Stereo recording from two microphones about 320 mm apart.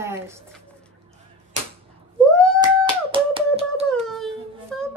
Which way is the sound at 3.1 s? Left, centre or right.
Centre.